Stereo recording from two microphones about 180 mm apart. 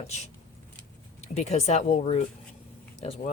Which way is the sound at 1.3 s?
40° left (ahead or behind).